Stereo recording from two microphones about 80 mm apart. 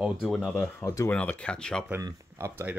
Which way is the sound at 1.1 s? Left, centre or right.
Centre.